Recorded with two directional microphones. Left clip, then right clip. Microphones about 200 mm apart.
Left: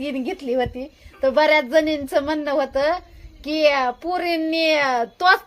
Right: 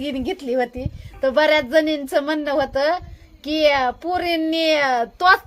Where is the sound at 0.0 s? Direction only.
5° right (ahead or behind).